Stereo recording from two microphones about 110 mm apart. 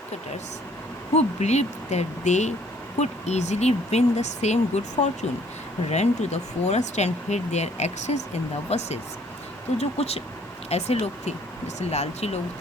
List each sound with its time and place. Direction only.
1.1 s speech: 90° left
8.7 s speech: 75° left (ahead or behind)